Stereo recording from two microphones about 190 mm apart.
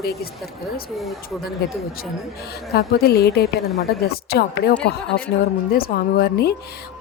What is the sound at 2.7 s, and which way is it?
Speech, 55° left (ahead or behind).